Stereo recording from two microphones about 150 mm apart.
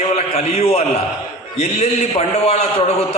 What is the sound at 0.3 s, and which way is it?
A man's voice, 45° left (ahead or behind).